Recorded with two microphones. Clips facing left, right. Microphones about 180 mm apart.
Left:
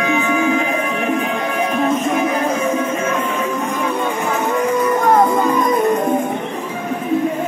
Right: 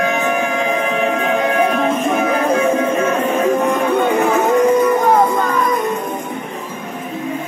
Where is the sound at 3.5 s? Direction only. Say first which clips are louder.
Right 5 dB; 60° right (ahead or behind).